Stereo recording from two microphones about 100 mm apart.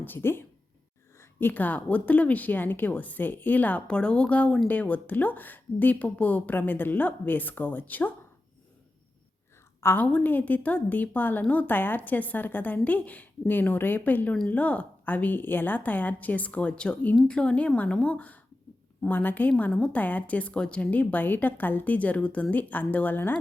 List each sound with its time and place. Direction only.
0.0 s a woman's voice: 20° left (ahead or behind)
9.8 s a woman's voice: 20° left (ahead or behind)